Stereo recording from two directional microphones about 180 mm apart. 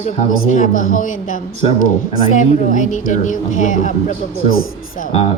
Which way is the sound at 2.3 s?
45° left (ahead or behind).